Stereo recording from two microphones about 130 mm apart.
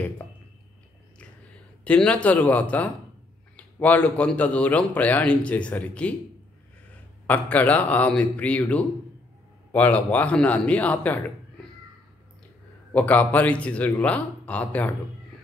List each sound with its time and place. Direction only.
1.9 s a man's voice: 10° left (ahead or behind)
7.2 s a man's voice: 10° left (ahead or behind)
12.9 s a man's voice: 10° left (ahead or behind)